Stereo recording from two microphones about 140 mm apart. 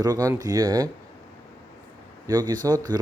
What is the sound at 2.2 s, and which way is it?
Speech, 30° right (ahead or behind).